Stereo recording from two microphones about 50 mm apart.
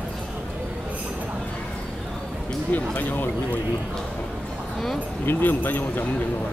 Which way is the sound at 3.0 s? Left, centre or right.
Left.